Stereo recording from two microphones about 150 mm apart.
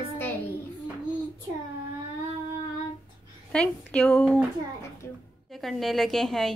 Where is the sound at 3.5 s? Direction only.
5° left (ahead or behind).